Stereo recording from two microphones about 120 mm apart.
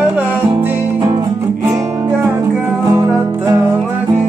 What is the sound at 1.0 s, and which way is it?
Music, 35° right (ahead or behind).